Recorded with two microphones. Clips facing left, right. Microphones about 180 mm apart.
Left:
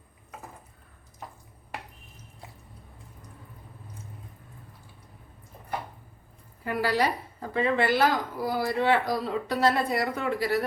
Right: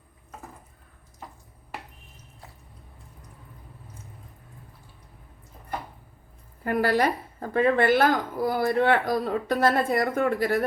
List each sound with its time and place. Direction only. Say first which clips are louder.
6.7 s a woman's voice: right 3 dB; 50° right (ahead or behind)